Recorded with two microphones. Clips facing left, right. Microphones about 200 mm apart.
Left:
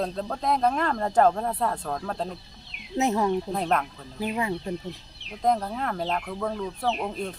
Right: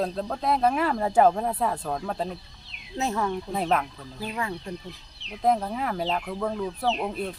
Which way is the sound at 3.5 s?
5° right (ahead or behind).